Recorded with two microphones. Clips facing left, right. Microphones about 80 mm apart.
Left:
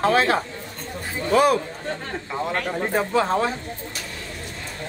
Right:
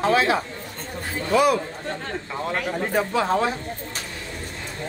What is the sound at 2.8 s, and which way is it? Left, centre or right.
Speech, left.